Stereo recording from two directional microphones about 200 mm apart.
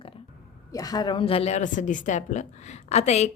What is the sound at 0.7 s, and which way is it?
Speech, 15° left (ahead or behind).